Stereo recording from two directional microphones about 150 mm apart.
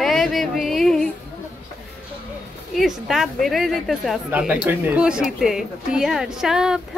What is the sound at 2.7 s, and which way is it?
Speech, centre (ahead or behind).